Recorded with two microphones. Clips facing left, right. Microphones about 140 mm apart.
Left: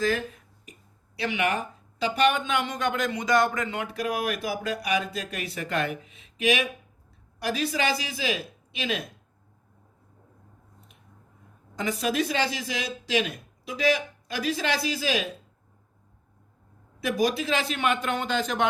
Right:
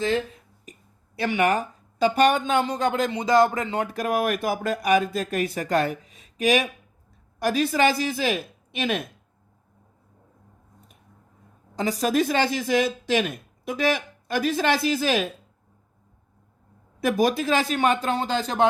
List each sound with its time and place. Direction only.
0.6 s speech: 45° right (ahead or behind)
3.8 s a woman's voice: 50° right (ahead or behind)
11.8 s a woman's voice: 40° right (ahead or behind)
17.0 s a man's voice: 50° right (ahead or behind)